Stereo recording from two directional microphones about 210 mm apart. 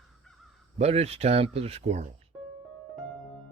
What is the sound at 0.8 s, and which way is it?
Speech, 30° right (ahead or behind).